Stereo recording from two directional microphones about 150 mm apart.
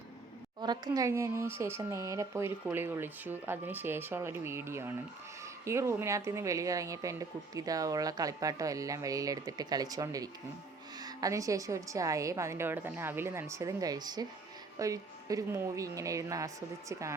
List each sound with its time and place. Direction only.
0.6 s speech: 25° right (ahead or behind)